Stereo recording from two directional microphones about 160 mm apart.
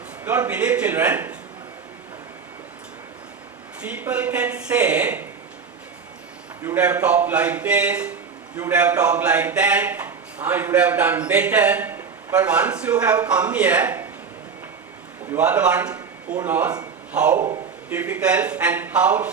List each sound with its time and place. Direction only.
0.3 s a man's voice: 10° right (ahead or behind)
3.8 s a man's voice: 10° right (ahead or behind)
6.6 s a man's voice: 10° right (ahead or behind)
15.3 s a man's voice: 10° right (ahead or behind)